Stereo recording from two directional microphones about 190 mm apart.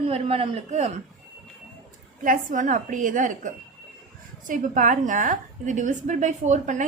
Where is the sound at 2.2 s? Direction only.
45° right (ahead or behind).